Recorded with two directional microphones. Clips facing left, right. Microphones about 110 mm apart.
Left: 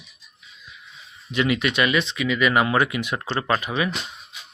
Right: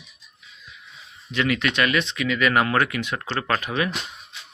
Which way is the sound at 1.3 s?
15° left (ahead or behind).